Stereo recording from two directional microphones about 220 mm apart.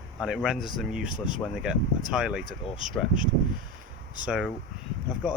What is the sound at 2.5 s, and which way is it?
Speech, 25° left (ahead or behind).